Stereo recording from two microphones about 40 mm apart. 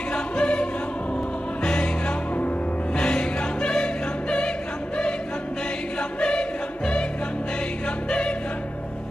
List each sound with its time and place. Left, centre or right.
0.1 s music: left
5.9 s choir: left